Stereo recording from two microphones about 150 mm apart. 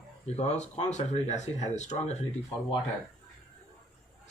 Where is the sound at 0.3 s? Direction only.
45° left (ahead or behind).